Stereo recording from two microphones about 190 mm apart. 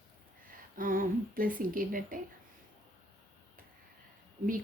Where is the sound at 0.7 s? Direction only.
45° right (ahead or behind).